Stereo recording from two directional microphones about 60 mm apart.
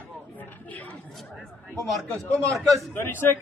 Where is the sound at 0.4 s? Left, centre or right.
Left.